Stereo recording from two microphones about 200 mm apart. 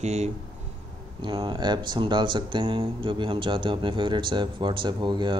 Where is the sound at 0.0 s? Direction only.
35° right (ahead or behind).